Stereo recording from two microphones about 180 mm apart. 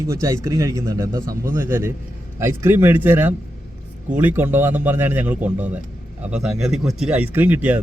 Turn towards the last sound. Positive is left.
turn(degrees=-10)  # may be behind; listen again after turning